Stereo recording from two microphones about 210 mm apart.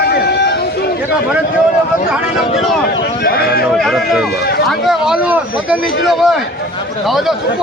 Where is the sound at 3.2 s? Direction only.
45° left (ahead or behind).